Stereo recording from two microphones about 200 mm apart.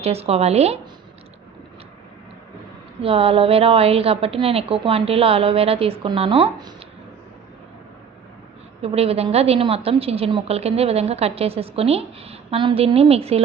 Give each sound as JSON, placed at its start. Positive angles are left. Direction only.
{"t": 0.0, "sound": "a woman's voice", "side_deg": -30}
{"t": 3.0, "sound": "a woman's voice", "side_deg": -30}
{"t": 8.8, "sound": "a woman's voice", "side_deg": -30}